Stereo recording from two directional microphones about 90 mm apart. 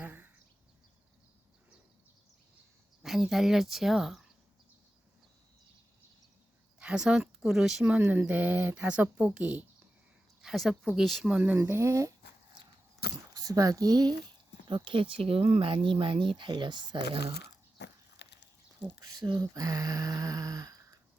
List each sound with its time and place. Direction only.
0.0 s a sound: 25° right (ahead or behind)
3.0 s speech: centre (ahead or behind)
6.7 s speech: 10° right (ahead or behind)
7.9 s speech: 20° right (ahead or behind)
10.4 s speech: centre (ahead or behind)
11.3 s speech: 15° right (ahead or behind)
11.5 s a sound: 30° right (ahead or behind)
13.3 s speech: 40° right (ahead or behind)
14.7 s speech: 70° right (ahead or behind)
19.0 s speech: 45° right (ahead or behind)
19.3 s a sound: 45° right (ahead or behind)